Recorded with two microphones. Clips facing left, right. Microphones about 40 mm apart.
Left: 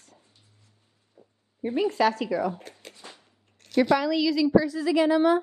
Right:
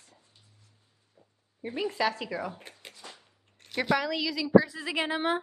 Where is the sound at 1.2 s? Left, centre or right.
Centre.